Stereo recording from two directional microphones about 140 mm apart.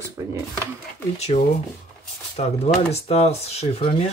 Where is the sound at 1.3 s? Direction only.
45° left (ahead or behind).